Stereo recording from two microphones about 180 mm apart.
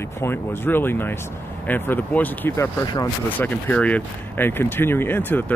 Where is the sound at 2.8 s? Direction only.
20° left (ahead or behind).